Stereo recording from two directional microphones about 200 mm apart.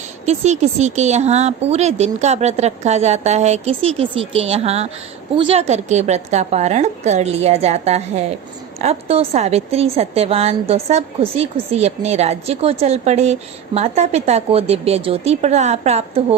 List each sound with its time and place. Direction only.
0.3 s a woman's voice: 35° right (ahead or behind)